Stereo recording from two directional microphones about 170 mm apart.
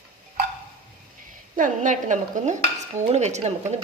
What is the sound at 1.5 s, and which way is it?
A woman's voice, 50° right (ahead or behind).